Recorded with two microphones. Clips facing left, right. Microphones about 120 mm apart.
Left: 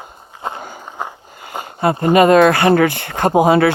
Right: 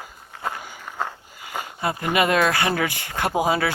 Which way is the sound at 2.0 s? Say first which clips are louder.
Left 10 dB; 45° left (ahead or behind).